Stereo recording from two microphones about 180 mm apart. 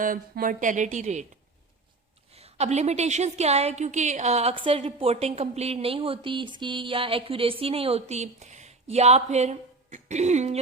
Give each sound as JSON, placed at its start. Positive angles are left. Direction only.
{"t": 0.0, "sound": "a woman's voice", "side_deg": -50}
{"t": 2.3, "sound": "a woman's voice", "side_deg": -35}